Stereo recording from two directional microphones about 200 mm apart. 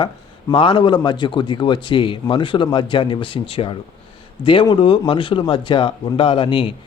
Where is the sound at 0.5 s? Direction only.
25° left (ahead or behind).